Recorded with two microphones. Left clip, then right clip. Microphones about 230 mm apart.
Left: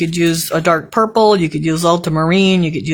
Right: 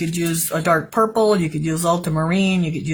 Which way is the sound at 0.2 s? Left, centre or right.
Left.